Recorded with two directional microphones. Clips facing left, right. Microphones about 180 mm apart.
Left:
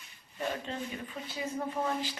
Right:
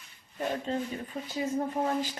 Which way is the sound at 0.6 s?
40° right (ahead or behind).